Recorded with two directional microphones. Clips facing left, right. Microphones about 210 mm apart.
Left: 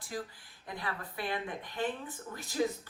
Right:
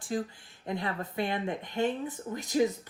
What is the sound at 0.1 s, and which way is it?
Speech, 25° right (ahead or behind).